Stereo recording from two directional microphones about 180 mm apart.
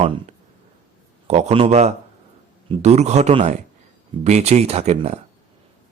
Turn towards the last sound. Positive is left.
turn(degrees=-40)  # may be behind; listen again after turning